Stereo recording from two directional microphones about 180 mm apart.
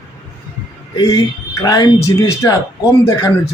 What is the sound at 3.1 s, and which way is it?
Speech, 15° left (ahead or behind).